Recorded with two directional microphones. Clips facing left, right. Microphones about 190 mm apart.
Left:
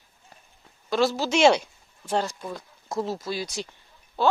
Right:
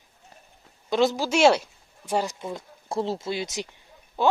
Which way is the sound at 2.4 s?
25° right (ahead or behind).